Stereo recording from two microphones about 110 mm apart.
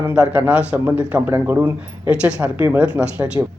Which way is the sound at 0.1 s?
15° right (ahead or behind).